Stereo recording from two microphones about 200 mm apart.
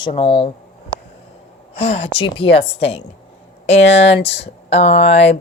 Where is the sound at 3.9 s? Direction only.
30° left (ahead or behind).